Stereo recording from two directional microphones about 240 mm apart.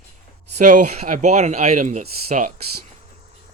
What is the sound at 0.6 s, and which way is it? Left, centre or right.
Speech, right.